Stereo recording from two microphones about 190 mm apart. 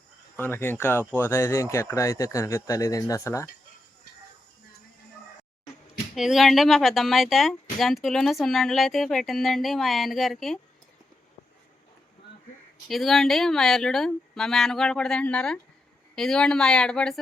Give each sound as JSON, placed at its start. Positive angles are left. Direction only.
{"t": 0.3, "sound": "speech", "side_deg": 10}
{"t": 6.1, "sound": "a woman's voice", "side_deg": 0}
{"t": 12.9, "sound": "a woman's voice", "side_deg": 0}